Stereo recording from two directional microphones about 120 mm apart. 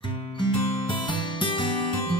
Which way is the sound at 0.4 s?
45° left (ahead or behind).